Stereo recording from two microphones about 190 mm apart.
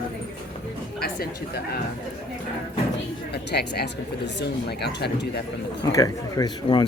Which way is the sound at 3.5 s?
60° left (ahead or behind).